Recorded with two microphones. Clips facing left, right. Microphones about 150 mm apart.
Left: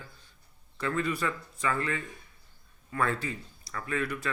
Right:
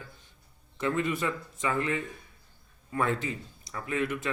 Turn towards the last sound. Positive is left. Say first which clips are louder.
# right 2 dB
turn(degrees=-20)  # may be behind; listen again after turning